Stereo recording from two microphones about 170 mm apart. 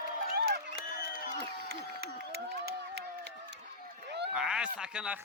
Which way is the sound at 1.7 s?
70° right (ahead or behind).